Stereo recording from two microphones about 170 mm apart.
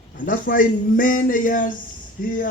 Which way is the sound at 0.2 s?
55° left (ahead or behind).